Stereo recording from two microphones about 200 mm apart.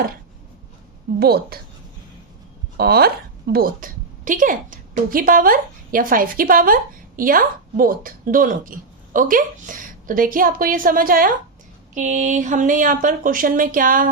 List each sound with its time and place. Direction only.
1.2 s a woman's voice: 50° right (ahead or behind)
2.7 s a woman's voice: 50° right (ahead or behind)